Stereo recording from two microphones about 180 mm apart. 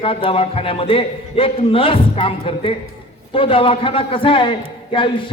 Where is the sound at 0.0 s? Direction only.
30° left (ahead or behind).